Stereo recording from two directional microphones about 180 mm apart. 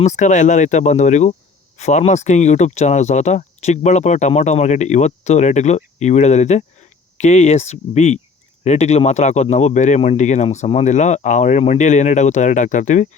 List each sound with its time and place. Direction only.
0.0 s speech: 40° left (ahead or behind)